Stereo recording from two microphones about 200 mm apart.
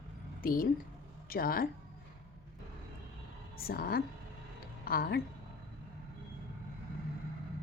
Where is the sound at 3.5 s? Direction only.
50° left (ahead or behind).